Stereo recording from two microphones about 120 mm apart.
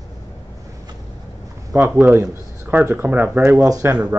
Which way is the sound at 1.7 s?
20° right (ahead or behind).